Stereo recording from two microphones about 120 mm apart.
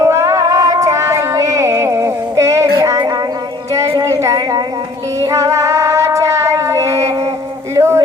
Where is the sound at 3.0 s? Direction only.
35° right (ahead or behind).